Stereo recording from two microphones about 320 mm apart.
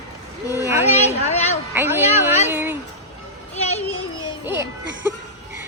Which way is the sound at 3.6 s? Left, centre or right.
Left.